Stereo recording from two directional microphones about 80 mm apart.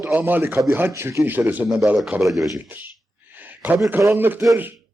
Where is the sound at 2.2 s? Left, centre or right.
Centre.